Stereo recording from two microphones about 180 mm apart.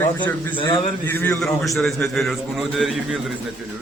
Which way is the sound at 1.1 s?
10° left (ahead or behind).